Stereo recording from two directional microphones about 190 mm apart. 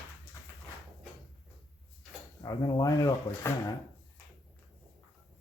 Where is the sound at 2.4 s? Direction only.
20° left (ahead or behind).